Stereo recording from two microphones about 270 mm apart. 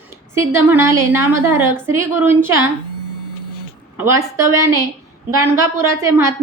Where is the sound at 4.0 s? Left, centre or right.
Centre.